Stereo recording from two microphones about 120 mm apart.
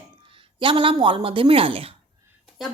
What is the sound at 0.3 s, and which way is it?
Speech, 45° right (ahead or behind).